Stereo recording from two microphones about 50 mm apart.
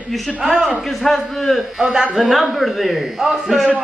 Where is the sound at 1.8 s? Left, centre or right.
Centre.